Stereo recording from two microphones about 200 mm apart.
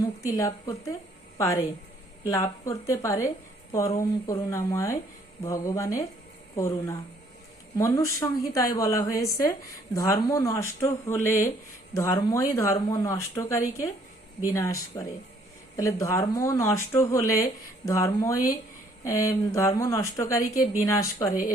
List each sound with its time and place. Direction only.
0.0 s speech: 15° left (ahead or behind)
2.2 s speech: 15° left (ahead or behind)